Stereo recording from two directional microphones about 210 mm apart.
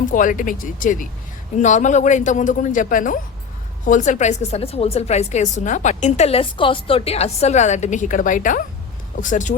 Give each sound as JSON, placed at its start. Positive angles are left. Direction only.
{"t": 0.0, "sound": "a woman's voice", "side_deg": 40}